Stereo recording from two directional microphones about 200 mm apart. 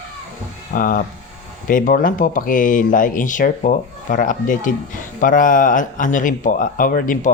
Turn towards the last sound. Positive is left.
turn(degrees=40)  # may be behind; listen again after turning